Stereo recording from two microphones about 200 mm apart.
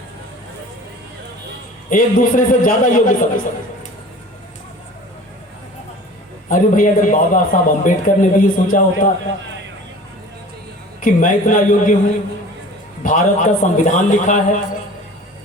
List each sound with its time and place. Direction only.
1.9 s a man's voice: 40° left (ahead or behind)
6.5 s a man's voice: 40° left (ahead or behind)
11.0 s a man's voice: 40° left (ahead or behind)
13.0 s a man's voice: 40° left (ahead or behind)